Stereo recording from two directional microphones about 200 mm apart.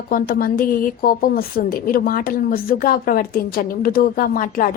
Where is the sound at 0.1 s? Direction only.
45° left (ahead or behind).